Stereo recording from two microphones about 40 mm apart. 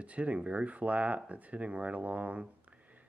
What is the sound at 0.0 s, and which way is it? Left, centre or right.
Speech, right.